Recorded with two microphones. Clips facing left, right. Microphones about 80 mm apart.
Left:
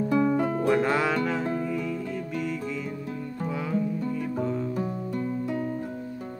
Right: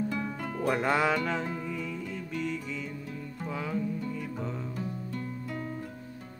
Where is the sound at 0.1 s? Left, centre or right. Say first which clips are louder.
Left 11 dB; left.